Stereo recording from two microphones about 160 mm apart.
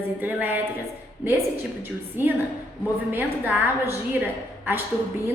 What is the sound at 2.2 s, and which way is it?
A woman's voice, 10° right (ahead or behind).